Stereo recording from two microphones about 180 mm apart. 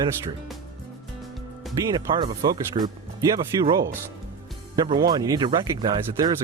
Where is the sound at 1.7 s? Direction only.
25° right (ahead or behind).